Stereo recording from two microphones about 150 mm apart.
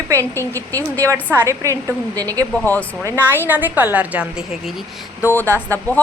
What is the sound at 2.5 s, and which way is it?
Speech, 10° left (ahead or behind).